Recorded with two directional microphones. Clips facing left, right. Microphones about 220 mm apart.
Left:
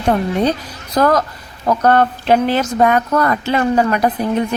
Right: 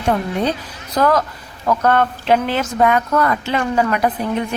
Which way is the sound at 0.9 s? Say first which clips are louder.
Left 2 dB; 40° left (ahead or behind).